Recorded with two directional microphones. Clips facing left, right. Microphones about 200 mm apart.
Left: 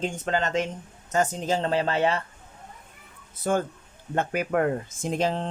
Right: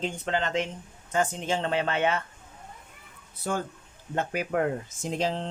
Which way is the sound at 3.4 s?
50° left (ahead or behind).